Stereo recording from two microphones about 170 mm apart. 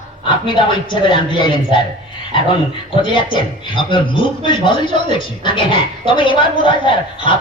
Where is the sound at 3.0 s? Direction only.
30° left (ahead or behind).